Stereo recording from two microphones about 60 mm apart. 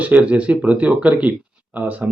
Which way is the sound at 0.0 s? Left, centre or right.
Right.